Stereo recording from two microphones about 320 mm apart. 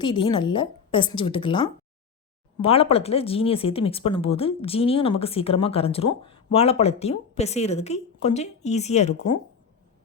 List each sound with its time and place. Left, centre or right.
0.0 s speech: centre